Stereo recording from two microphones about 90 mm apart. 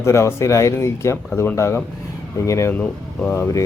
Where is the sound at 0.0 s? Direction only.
30° left (ahead or behind).